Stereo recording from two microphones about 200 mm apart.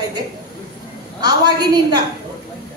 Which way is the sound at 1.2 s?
20° right (ahead or behind).